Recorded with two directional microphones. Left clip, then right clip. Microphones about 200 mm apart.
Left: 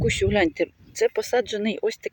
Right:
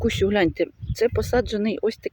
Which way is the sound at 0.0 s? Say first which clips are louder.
Right 1 dB; 5° right (ahead or behind).